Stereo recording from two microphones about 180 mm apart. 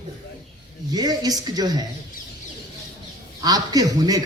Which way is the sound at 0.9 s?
20° right (ahead or behind).